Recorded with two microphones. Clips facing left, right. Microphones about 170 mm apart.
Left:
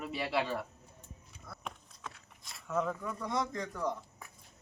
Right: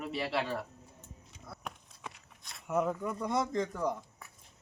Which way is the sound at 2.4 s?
Centre (ahead or behind).